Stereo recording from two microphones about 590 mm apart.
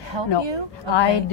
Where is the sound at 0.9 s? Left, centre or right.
Left.